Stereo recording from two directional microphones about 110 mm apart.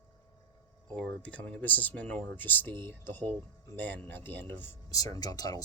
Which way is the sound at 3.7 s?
15° left (ahead or behind).